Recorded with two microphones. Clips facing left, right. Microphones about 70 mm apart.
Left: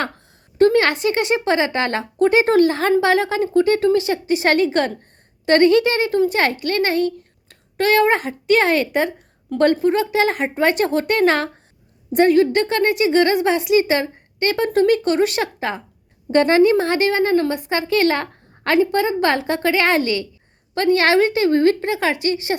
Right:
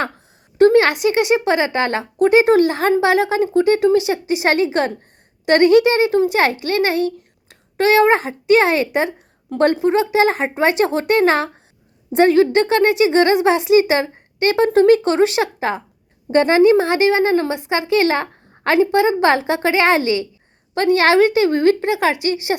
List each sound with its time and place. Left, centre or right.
0.6 s speech: centre